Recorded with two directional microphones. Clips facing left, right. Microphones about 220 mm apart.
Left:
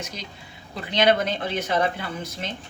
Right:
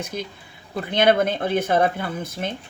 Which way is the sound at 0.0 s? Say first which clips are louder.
Right 6 dB; 55° right (ahead or behind).